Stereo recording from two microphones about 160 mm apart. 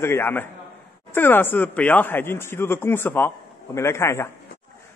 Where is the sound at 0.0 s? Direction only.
15° left (ahead or behind).